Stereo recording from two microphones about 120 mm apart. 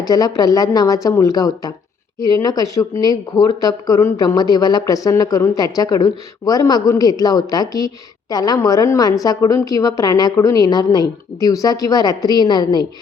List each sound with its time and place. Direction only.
0.0 s speech: 30° left (ahead or behind)